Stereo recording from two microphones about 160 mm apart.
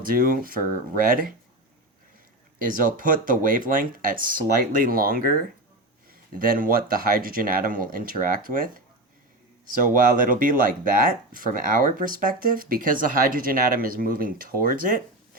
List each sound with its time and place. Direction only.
0.0 s speech: 60° right (ahead or behind)
2.6 s speech: 55° right (ahead or behind)
6.4 s speech: 60° right (ahead or behind)